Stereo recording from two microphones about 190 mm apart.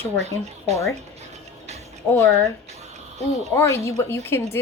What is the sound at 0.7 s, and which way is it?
Speech, 35° right (ahead or behind).